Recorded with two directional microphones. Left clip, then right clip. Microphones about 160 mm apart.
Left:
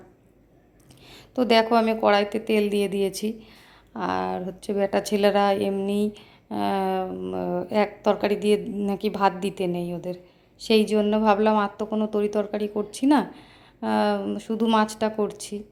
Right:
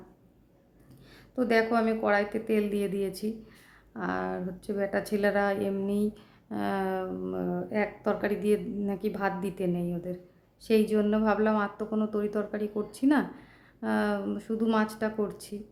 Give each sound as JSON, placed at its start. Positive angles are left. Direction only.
{"t": 1.1, "sound": "speech", "side_deg": 20}